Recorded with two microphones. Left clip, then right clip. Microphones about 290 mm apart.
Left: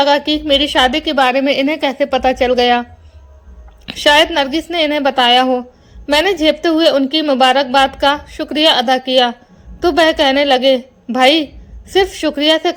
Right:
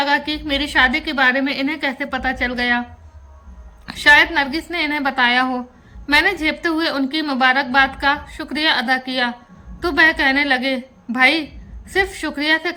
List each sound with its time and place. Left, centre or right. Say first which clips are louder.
0.0 s a woman's voice: left 6 dB; centre
3.9 s a woman's voice: left 2 dB; centre